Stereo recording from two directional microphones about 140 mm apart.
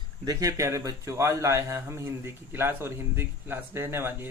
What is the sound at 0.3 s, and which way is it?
A man's voice, 25° right (ahead or behind).